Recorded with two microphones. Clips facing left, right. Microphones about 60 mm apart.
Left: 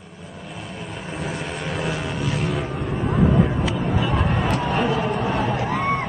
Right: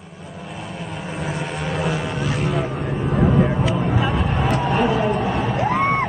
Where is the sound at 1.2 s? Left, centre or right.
Centre.